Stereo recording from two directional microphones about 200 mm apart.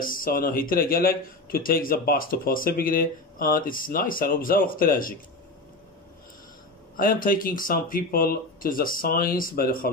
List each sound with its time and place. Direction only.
0.0 s speech: 45° left (ahead or behind)
7.0 s speech: 45° left (ahead or behind)